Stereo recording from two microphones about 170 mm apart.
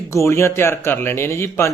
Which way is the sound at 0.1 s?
15° left (ahead or behind).